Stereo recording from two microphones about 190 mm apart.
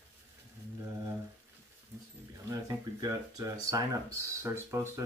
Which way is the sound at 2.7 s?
20° right (ahead or behind).